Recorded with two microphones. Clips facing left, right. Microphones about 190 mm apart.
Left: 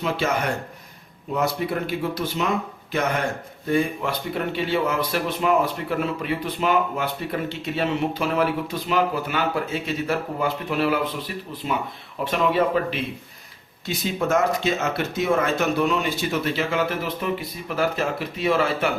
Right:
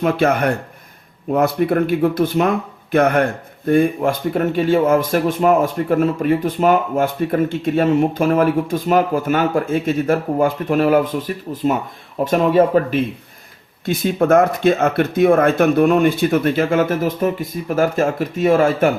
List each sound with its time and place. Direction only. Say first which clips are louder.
0.0 s speech: right 8 dB; 55° right (ahead or behind)